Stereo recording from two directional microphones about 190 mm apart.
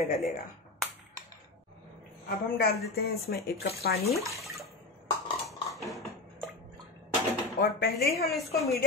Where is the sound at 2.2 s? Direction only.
55° left (ahead or behind).